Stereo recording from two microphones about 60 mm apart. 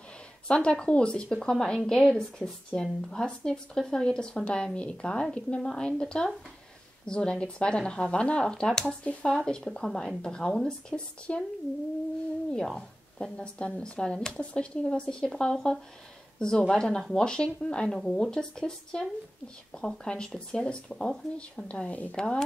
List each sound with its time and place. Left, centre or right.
0.5 s speech: centre
12.5 s a woman's voice: centre
13.6 s speech: centre